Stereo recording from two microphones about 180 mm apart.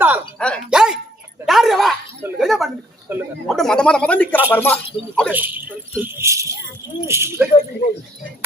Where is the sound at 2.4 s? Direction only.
Centre (ahead or behind).